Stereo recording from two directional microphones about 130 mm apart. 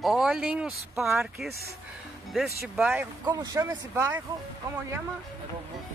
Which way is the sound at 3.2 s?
30° right (ahead or behind).